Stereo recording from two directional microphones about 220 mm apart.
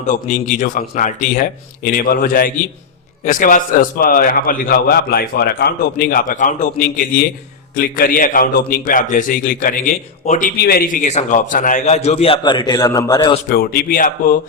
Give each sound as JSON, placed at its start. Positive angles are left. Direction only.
{"t": 0.1, "sound": "a man's voice", "side_deg": 35}
{"t": 13.5, "sound": "a man's voice", "side_deg": 45}